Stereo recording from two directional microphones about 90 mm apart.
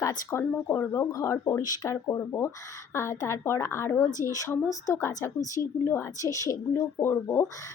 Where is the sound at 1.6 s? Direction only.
45° left (ahead or behind).